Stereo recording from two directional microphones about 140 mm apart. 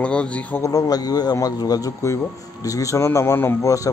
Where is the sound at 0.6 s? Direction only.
25° left (ahead or behind).